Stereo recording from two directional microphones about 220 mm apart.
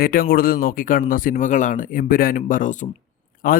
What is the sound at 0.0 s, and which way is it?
A man's voice, 40° left (ahead or behind).